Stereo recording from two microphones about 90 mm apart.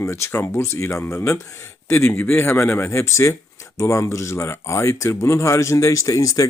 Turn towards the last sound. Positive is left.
turn(degrees=40)  # may be behind; listen again after turning